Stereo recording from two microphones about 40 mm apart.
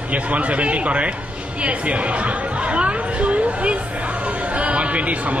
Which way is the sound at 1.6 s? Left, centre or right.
Right.